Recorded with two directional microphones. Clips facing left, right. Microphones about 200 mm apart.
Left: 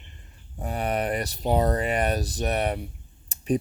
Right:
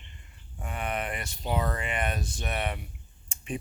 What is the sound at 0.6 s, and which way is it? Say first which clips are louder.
Speech: left 6 dB; 35° left (ahead or behind).